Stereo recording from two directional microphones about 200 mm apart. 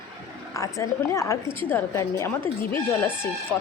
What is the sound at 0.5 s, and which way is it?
A woman's voice, 15° left (ahead or behind).